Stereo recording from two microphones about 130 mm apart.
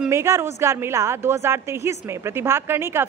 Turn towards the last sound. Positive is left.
turn(degrees=-20)  # may be behind; listen again after turning